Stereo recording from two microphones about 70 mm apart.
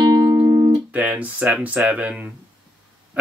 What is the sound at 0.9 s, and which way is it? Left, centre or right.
Speech, right.